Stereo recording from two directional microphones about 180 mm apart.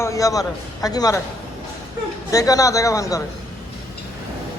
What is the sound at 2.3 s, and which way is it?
Speech, 20° left (ahead or behind).